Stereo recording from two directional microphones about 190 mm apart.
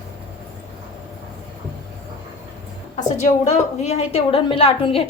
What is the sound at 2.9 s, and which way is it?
A woman's voice, 40° left (ahead or behind).